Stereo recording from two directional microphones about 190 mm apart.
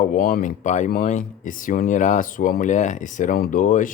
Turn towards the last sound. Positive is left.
turn(degrees=45)  # may be behind; listen again after turning